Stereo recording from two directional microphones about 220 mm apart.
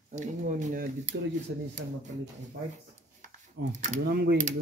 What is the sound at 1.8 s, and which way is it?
Speech, 55° right (ahead or behind).